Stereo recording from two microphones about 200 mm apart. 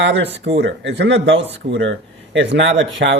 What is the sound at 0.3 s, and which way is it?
A man's voice, 65° right (ahead or behind).